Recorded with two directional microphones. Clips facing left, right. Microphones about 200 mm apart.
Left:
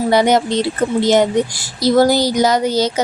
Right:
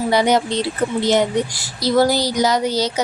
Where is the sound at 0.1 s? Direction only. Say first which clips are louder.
Left 3 dB; 50° left (ahead or behind).